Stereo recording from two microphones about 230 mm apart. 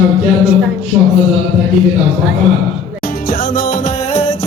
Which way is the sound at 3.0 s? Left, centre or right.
Left.